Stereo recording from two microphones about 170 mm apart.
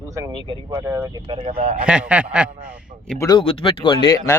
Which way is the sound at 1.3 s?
35° right (ahead or behind).